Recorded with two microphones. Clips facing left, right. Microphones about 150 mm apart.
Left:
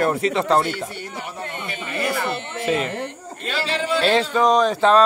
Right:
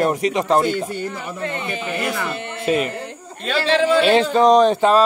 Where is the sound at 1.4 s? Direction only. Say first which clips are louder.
Right 6 dB; 90° right.